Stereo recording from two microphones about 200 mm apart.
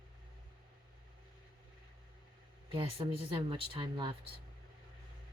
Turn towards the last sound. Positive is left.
turn(degrees=-25)  # may be behind; listen again after turning